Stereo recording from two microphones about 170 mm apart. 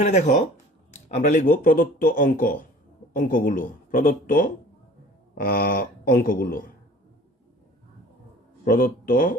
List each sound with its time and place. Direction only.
0.0 s a man's voice: 45° left (ahead or behind)
8.6 s a man's voice: 55° left (ahead or behind)